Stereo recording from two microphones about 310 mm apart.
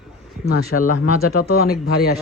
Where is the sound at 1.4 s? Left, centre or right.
Left.